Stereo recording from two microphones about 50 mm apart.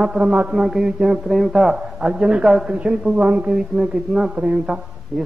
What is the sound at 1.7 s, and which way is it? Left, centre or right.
A man's voice, centre.